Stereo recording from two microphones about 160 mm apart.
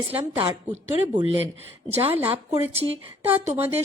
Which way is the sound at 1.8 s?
40° right (ahead or behind).